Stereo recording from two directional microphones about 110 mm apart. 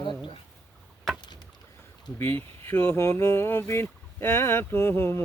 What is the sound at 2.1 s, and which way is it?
Speech, 20° left (ahead or behind).